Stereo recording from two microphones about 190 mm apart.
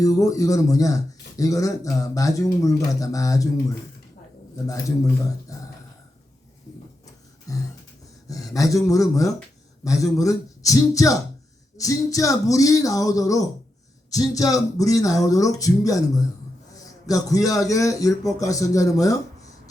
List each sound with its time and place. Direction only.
0.0 s a man's voice: 20° left (ahead or behind)
4.5 s a man's voice: 15° left (ahead or behind)
7.5 s a man's voice: 20° left (ahead or behind)
16.7 s a sound: 20° left (ahead or behind)
17.5 s a man's voice: 15° left (ahead or behind)